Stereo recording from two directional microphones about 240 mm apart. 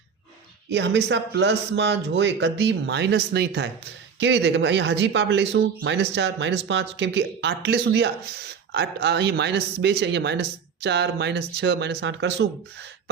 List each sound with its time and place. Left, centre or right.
0.7 s speech: right